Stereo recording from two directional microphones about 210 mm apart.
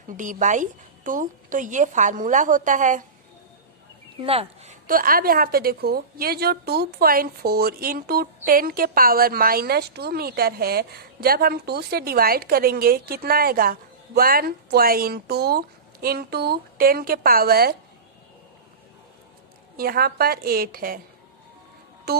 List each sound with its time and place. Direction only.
0.2 s a woman's voice: 35° right (ahead or behind)
4.2 s a woman's voice: 30° right (ahead or behind); by 17.7 s 45° right (ahead or behind)
19.8 s a woman's voice: 45° right (ahead or behind)